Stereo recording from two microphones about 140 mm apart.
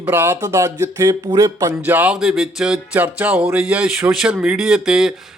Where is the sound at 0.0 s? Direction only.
15° right (ahead or behind).